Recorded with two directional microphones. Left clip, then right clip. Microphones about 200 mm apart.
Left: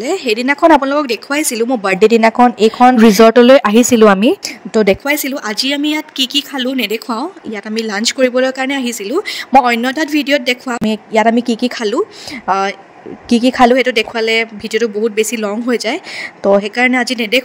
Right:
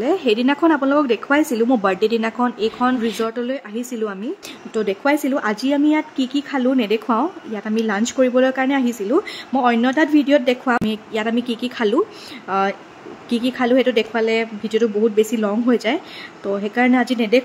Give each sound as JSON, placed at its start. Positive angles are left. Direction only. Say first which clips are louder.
{"t": 0.0, "sound": "speech", "louder": "left 2 dB", "side_deg": 40}
{"t": 3.2, "sound": "speech", "louder": "left 18 dB", "side_deg": 45}
{"t": 5.3, "sound": "speech", "louder": "even", "side_deg": -5}
{"t": 5.6, "sound": "speech", "louder": "left 5 dB", "side_deg": 50}
{"t": 6.5, "sound": "speech", "louder": "left 2 dB", "side_deg": 0}
{"t": 7.5, "sound": "speech", "louder": "left 3 dB", "side_deg": 40}